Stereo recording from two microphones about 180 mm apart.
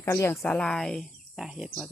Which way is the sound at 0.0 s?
15° left (ahead or behind).